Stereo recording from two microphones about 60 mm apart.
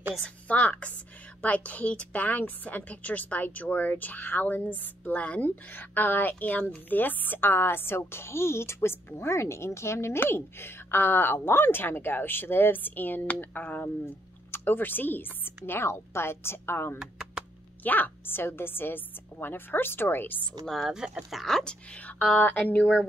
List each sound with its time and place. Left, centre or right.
0.2 s a woman's voice: left
17.8 s a woman's voice: left
20.6 s speech: centre
20.9 s speech: centre
21.4 s speech: centre
21.9 s a woman's voice: left